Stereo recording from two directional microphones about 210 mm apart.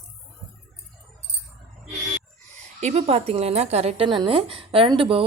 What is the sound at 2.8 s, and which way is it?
A woman's voice, 30° right (ahead or behind).